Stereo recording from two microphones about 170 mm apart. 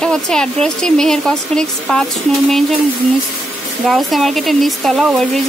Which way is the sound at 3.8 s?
Centre (ahead or behind).